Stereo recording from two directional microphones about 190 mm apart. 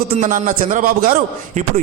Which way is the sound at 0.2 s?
40° right (ahead or behind).